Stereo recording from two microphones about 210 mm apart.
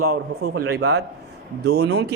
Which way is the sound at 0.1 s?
50° right (ahead or behind).